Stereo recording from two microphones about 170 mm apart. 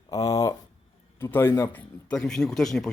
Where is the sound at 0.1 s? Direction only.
20° left (ahead or behind).